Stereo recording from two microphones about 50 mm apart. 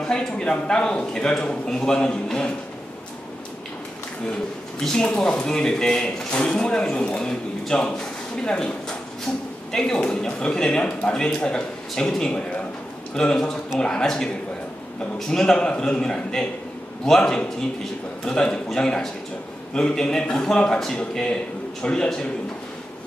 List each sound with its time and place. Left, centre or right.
0.0 s a man's voice: centre
4.7 s a man's voice: centre
5.0 s a man's voice: left